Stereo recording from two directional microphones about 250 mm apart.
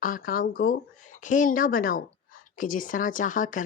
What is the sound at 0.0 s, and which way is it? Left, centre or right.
Speech, left.